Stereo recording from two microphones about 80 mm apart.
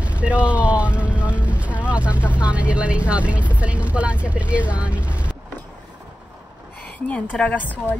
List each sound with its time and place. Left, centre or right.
0.0 s speech: centre
7.2 s a woman's voice: centre